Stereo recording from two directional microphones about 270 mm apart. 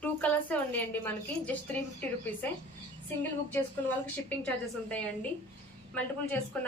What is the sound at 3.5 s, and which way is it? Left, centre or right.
A woman's voice, centre.